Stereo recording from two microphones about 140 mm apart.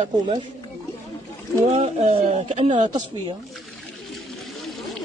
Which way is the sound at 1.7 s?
45° right (ahead or behind).